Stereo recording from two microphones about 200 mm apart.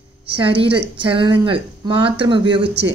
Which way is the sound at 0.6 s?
25° right (ahead or behind).